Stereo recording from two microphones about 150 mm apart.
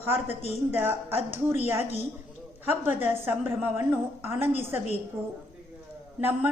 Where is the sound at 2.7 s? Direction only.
15° right (ahead or behind).